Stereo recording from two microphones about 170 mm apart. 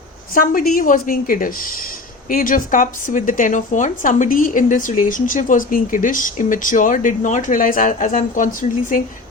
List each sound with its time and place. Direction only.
0.3 s a woman's voice: 55° left (ahead or behind)